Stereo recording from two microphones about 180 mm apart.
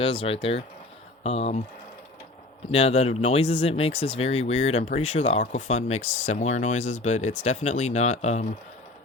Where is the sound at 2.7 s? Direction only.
35° left (ahead or behind).